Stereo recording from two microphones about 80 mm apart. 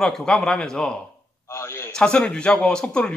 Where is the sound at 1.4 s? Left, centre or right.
Left.